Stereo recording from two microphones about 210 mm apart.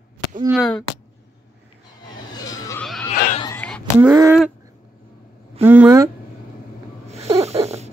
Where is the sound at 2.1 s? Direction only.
15° left (ahead or behind).